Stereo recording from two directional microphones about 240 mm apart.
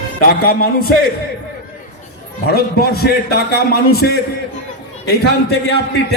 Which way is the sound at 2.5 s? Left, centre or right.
Left.